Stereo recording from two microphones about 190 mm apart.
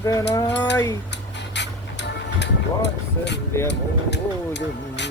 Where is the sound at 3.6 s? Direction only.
65° left (ahead or behind).